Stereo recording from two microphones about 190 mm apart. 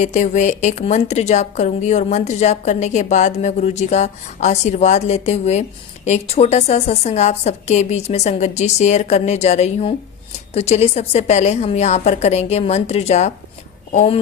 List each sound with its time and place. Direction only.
0.0 s a woman's voice: 40° left (ahead or behind)